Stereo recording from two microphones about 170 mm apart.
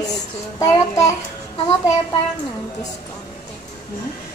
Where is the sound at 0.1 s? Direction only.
20° left (ahead or behind).